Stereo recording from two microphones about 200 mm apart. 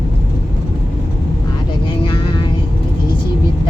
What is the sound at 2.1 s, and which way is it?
Vehicle, 20° left (ahead or behind).